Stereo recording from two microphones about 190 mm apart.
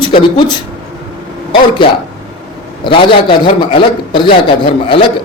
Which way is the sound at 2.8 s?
25° left (ahead or behind).